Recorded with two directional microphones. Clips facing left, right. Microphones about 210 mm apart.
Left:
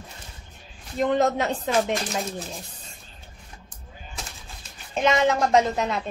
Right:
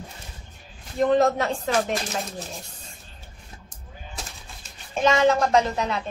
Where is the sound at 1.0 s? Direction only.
20° left (ahead or behind).